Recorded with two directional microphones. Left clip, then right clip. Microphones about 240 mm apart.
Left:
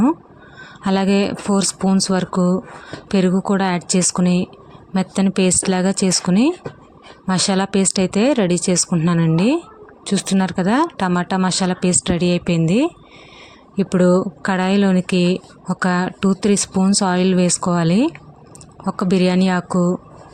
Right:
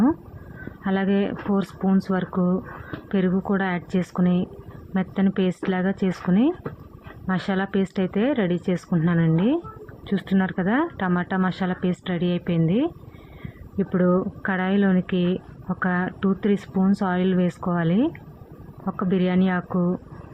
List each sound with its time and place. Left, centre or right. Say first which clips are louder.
0.9 s speech: left 6 dB; left